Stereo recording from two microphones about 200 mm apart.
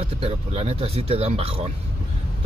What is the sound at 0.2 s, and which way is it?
Speech, 30° right (ahead or behind).